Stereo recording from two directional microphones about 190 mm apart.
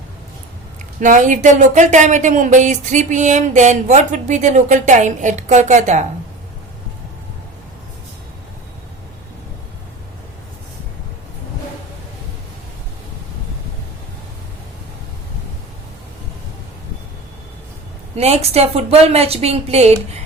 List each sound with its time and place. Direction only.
0.9 s speech: 40° right (ahead or behind)
18.2 s speech: 35° right (ahead or behind)